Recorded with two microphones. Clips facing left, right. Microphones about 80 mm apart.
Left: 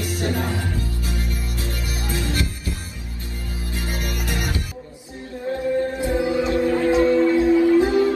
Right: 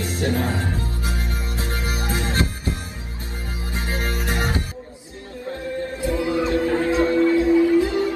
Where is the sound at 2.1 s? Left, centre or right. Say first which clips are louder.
Right 1 dB; right.